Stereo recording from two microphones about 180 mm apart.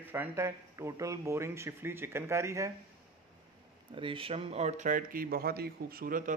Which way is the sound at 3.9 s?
30° right (ahead or behind).